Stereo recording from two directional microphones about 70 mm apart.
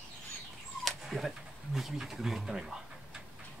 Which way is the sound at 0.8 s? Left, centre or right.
Centre.